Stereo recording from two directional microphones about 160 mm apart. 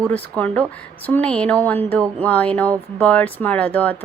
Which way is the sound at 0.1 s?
10° left (ahead or behind).